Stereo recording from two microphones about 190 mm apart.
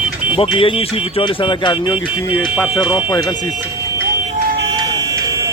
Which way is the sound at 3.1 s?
20° left (ahead or behind).